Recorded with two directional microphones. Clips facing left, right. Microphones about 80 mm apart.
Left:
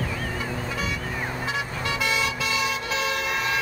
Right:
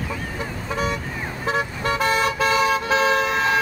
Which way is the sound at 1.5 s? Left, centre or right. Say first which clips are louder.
Right 10 dB; right.